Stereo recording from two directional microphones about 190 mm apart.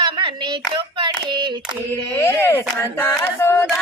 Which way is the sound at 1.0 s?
25° right (ahead or behind).